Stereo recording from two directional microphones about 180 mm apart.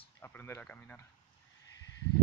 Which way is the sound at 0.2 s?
10° left (ahead or behind).